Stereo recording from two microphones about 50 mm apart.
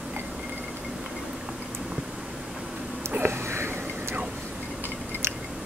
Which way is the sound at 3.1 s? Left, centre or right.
Right.